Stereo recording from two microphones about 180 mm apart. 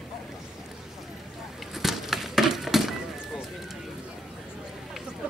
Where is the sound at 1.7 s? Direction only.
Centre (ahead or behind).